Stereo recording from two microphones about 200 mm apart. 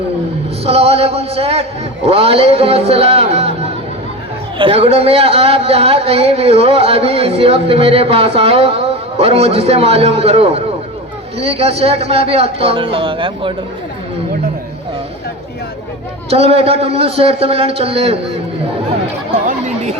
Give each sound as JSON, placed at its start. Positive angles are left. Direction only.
{"t": 0.6, "sound": "a man's voice", "side_deg": -30}
{"t": 4.5, "sound": "a man's voice", "side_deg": -25}
{"t": 16.3, "sound": "a man's voice", "side_deg": -30}
{"t": 19.5, "sound": "speech", "side_deg": -35}